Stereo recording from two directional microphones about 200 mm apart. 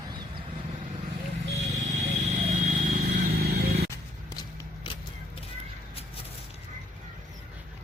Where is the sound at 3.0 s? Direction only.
55° right (ahead or behind).